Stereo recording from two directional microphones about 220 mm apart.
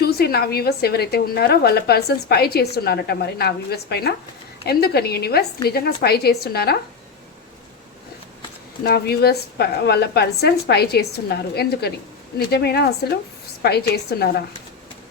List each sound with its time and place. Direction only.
0.0 s a woman's voice: 45° left (ahead or behind)
8.8 s a woman's voice: 45° left (ahead or behind)